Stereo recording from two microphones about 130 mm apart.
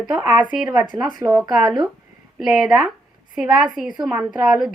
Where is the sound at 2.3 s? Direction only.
5° right (ahead or behind).